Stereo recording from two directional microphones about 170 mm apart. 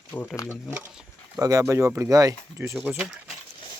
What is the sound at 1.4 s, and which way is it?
Speech, 20° right (ahead or behind).